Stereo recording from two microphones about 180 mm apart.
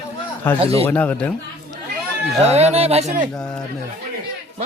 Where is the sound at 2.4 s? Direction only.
35° right (ahead or behind).